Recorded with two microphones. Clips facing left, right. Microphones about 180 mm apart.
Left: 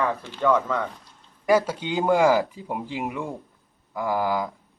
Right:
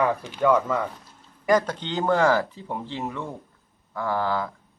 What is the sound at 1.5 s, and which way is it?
Speech, 10° left (ahead or behind).